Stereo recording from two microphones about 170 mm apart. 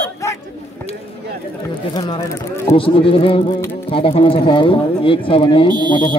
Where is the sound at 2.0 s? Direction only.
30° left (ahead or behind).